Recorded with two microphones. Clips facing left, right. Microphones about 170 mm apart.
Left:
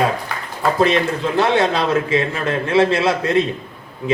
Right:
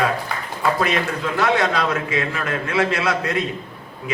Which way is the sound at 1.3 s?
30° left (ahead or behind).